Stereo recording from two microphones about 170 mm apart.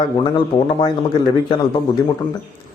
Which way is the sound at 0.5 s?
35° left (ahead or behind).